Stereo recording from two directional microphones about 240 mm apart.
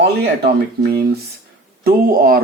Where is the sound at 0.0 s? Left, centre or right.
Right.